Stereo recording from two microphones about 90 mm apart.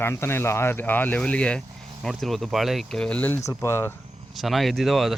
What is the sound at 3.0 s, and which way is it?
Speech, 15° left (ahead or behind).